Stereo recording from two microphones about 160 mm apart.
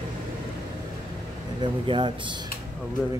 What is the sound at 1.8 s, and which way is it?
Speech, 30° right (ahead or behind).